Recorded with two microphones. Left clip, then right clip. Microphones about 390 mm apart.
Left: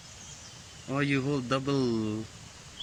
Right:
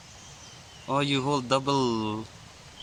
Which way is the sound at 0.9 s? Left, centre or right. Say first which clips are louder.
Right 4 dB; centre.